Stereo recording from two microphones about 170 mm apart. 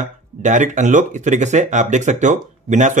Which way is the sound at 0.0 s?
45° right (ahead or behind).